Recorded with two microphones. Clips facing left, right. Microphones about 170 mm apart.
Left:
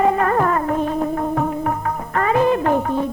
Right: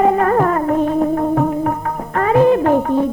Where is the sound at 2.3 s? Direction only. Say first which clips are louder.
Right 5 dB; 35° right (ahead or behind).